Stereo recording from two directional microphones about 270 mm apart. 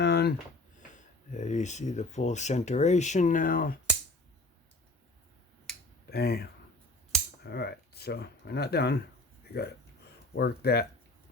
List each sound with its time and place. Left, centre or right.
0.0 s a sound: left
0.8 s speech: left
6.1 s speech: left
10.3 s speech: left